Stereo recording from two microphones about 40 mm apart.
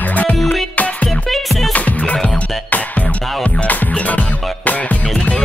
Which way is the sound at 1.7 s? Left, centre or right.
Left.